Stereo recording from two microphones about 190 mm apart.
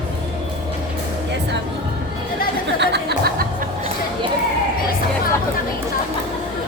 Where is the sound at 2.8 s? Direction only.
60° right (ahead or behind).